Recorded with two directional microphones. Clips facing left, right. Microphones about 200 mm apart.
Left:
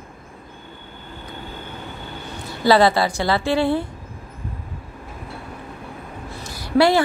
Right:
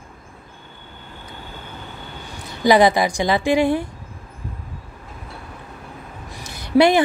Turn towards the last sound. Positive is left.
turn(degrees=-20)  # may be behind; listen again after turning